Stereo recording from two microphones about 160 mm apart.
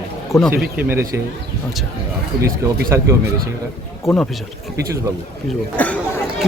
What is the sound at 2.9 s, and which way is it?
Speech, 15° right (ahead or behind).